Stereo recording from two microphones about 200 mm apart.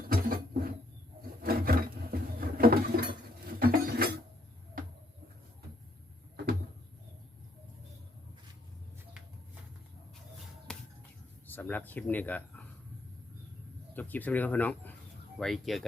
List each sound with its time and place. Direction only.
0.1 s a sound: 50° right (ahead or behind)
1.4 s wood: 45° right (ahead or behind)
3.6 s a sound: 50° right (ahead or behind)
10.7 s finger snapping: 5° left (ahead or behind)
11.4 s speech: 10° left (ahead or behind)
13.9 s speech: 10° left (ahead or behind)